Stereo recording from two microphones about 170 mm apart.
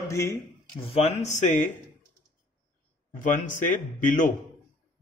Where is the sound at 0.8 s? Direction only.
35° left (ahead or behind).